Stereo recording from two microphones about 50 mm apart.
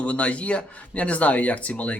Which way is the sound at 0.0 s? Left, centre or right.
Left.